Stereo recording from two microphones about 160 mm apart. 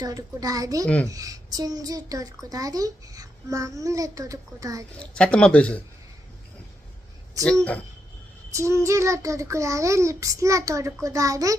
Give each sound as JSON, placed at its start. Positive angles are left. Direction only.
{"t": 0.0, "sound": "a child's voice", "side_deg": -20}
{"t": 4.9, "sound": "speech", "side_deg": 5}
{"t": 8.5, "sound": "a child's voice", "side_deg": -20}